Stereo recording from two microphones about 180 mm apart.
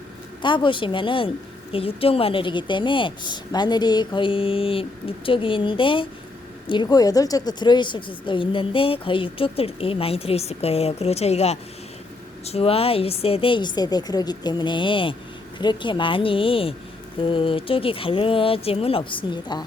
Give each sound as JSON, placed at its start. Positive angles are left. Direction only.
{"t": 0.4, "sound": "speech", "side_deg": 25}